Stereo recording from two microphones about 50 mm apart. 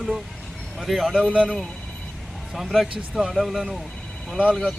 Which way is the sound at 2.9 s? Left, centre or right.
Centre.